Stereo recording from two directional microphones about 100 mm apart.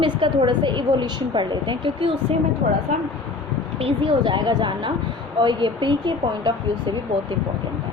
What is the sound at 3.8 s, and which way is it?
Speech, 55° right (ahead or behind).